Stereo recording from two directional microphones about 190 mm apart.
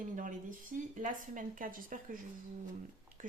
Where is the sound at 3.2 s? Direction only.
45° right (ahead or behind).